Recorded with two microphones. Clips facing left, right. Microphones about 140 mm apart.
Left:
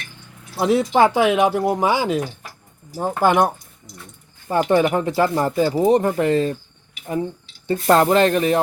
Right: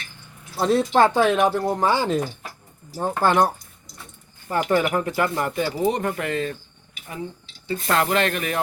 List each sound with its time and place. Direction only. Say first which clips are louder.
0.6 s speech: left 2 dB; 10° left (ahead or behind); by 6.6 s 35° left (ahead or behind)
7.9 s speech: left 7 dB; 35° left (ahead or behind)